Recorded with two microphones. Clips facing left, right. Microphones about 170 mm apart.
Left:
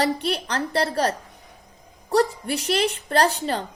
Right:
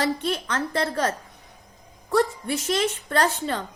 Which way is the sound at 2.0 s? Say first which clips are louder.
Left 1 dB; 35° left (ahead or behind).